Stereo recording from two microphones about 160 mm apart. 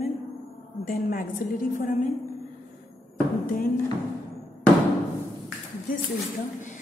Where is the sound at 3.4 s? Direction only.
65° left (ahead or behind).